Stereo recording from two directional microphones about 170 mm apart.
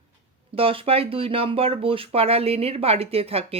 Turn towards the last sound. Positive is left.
turn(degrees=-35)  # may be behind; listen again after turning